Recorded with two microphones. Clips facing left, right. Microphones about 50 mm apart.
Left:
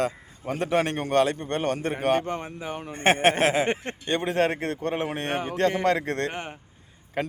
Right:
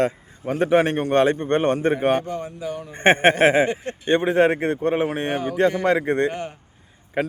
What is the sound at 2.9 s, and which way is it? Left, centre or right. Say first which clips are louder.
Speech: right 4 dB; right.